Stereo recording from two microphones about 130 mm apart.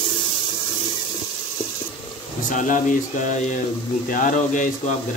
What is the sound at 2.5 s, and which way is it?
Speech, 80° left.